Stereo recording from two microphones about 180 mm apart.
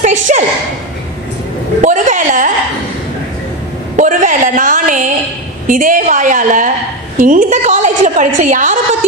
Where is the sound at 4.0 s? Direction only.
45° right (ahead or behind).